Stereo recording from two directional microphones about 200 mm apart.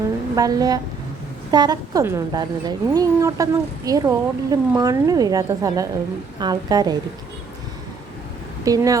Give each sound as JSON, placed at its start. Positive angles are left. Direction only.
{"t": 0.3, "sound": "speech", "side_deg": -20}
{"t": 8.6, "sound": "speech", "side_deg": -15}